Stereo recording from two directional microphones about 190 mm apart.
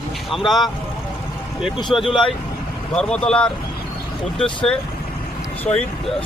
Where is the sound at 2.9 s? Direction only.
5° left (ahead or behind).